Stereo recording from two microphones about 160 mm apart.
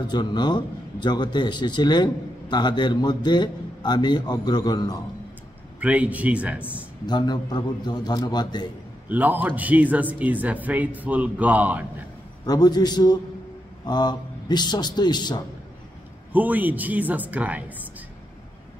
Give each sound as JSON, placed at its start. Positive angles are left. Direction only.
{"t": 0.0, "sound": "a man's voice", "side_deg": 25}
{"t": 5.8, "sound": "speech", "side_deg": -10}
{"t": 7.1, "sound": "a man's voice", "side_deg": 25}
{"t": 9.1, "sound": "speech", "side_deg": -10}
{"t": 12.4, "sound": "a man's voice", "side_deg": 25}
{"t": 16.3, "sound": "speech", "side_deg": -10}